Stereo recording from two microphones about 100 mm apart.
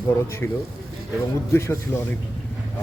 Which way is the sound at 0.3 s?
25° left (ahead or behind).